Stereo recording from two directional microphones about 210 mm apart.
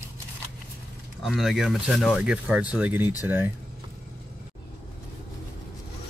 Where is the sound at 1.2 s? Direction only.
Centre (ahead or behind).